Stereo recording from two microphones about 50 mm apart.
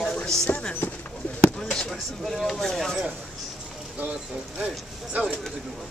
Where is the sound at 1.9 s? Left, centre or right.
Centre.